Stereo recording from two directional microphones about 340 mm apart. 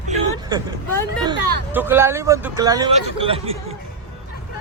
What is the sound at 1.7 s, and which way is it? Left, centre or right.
A man's voice, centre.